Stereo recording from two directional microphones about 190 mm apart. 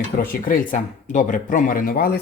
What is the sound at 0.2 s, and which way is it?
Speech, 50° left (ahead or behind).